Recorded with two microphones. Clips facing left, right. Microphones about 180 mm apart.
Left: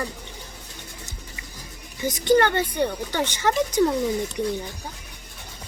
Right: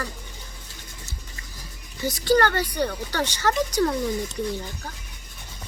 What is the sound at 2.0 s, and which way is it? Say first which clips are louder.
Speech: left 2 dB; 20° left (ahead or behind).